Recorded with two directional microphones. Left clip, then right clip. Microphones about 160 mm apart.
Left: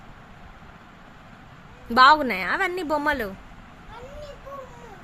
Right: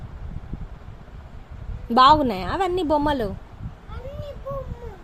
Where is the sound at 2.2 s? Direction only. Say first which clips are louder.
Even; 45° right (ahead or behind).